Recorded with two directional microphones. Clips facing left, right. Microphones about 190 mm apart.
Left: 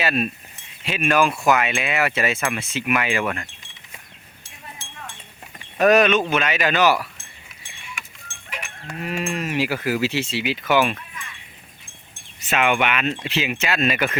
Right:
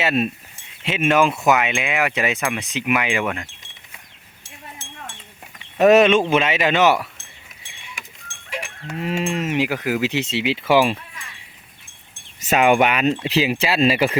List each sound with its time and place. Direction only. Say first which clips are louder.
0.0 s speech: right 2 dB; 25° right (ahead or behind)
5.7 s speech: right 3 dB; 25° right (ahead or behind)
9.0 s speech: right 3 dB; 25° right (ahead or behind)
12.5 s speech: right 5 dB; 40° right (ahead or behind)